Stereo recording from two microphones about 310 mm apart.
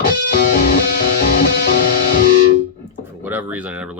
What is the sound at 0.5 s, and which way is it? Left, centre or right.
Music, left.